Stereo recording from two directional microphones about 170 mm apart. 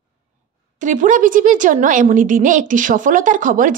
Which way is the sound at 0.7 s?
50° right (ahead or behind).